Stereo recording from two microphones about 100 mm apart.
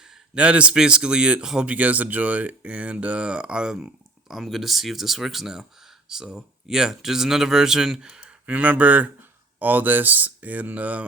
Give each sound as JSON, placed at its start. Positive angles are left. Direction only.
{"t": 0.3, "sound": "speech", "side_deg": -10}